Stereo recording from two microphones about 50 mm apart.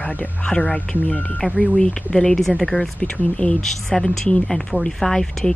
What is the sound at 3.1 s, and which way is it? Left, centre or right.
Speech, left.